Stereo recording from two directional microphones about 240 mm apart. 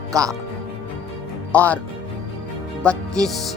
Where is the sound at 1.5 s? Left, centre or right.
Centre.